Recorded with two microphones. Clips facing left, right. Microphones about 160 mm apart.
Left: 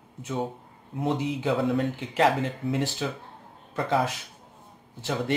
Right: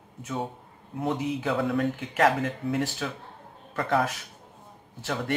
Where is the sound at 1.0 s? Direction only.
25° left (ahead or behind).